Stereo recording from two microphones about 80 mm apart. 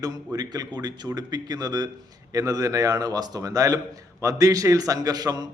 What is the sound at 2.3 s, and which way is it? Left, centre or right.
A man's voice, right.